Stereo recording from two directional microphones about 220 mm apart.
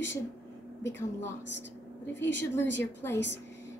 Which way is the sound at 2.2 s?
55° left (ahead or behind).